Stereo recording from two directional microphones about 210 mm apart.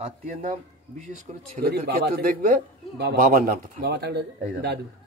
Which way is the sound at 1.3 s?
30° right (ahead or behind).